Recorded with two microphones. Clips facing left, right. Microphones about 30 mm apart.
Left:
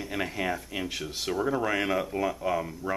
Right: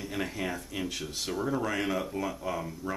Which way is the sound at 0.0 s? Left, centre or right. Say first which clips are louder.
Left 3 dB; centre.